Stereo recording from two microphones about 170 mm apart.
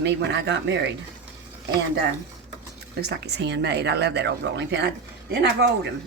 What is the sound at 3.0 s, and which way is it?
Speech, 75° right (ahead or behind).